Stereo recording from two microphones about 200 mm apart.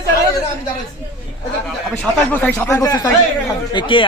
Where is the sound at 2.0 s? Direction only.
10° left (ahead or behind).